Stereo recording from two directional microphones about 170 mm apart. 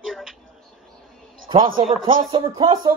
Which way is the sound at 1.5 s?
25° right (ahead or behind).